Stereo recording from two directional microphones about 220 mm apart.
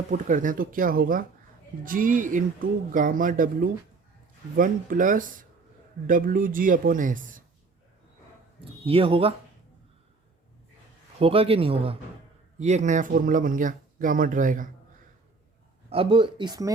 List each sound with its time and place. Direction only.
0.1 s speech: 35° right (ahead or behind)
8.8 s speech: 25° right (ahead or behind)
11.2 s speech: 25° right (ahead or behind)
15.9 s speech: 25° right (ahead or behind)